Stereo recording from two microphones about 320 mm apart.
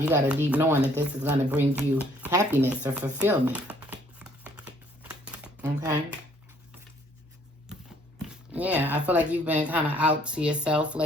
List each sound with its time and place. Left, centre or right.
0.0 s speech: centre
8.5 s speech: centre